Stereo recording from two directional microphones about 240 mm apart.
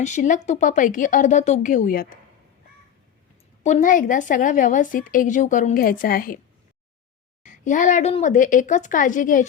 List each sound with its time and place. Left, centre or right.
0.0 s a woman's voice: left
3.6 s a woman's voice: left
7.4 s a woman's voice: left